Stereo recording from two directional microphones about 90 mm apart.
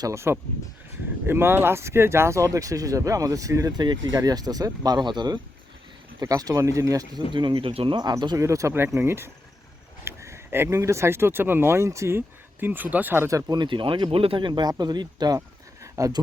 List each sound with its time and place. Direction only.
0.0 s speech: 30° right (ahead or behind); by 5.4 s 55° right (ahead or behind)
6.1 s speech: 40° right (ahead or behind)
7.3 s speech: 65° right (ahead or behind); by 7.9 s 85° right
8.4 s speech: 35° right (ahead or behind)
10.0 s a sound: 30° right (ahead or behind)
10.7 s speech: 35° right (ahead or behind); by 13.2 s 20° right (ahead or behind)
13.2 s speech: 40° right (ahead or behind)
13.6 s speech: 65° right (ahead or behind)
15.4 s a sound: 35° right (ahead or behind)